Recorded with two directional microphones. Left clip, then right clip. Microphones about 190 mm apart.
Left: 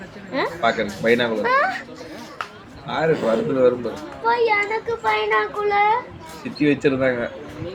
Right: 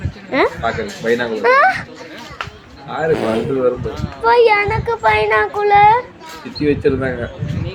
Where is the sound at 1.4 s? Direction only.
45° right (ahead or behind).